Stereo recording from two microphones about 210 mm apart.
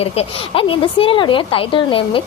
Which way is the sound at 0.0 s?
25° left (ahead or behind).